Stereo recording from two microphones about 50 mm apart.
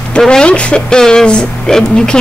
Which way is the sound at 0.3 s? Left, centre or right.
Left.